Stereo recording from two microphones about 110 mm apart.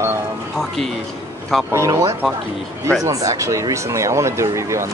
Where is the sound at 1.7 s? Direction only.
25° right (ahead or behind).